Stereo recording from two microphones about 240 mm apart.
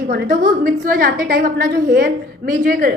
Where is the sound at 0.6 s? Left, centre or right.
Right.